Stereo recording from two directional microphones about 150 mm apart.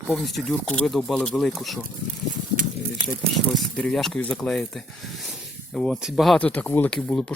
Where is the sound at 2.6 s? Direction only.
60° right (ahead or behind).